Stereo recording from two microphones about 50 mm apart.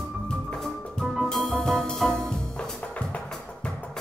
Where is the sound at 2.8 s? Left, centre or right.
Left.